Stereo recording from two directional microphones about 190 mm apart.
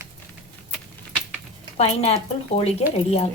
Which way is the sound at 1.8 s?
35° left (ahead or behind).